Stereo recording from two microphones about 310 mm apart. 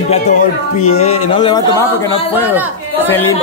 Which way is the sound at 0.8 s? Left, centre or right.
Left.